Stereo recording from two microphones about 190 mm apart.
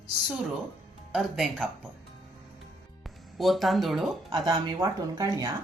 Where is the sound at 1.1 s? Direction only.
Centre (ahead or behind).